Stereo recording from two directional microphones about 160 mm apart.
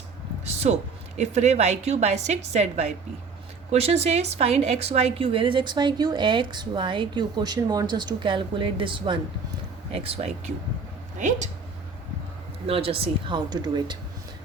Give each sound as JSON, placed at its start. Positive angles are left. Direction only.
{"t": 0.4, "sound": "a sound", "side_deg": -45}
{"t": 1.2, "sound": "a woman's voice", "side_deg": -45}
{"t": 12.6, "sound": "a woman's voice", "side_deg": -35}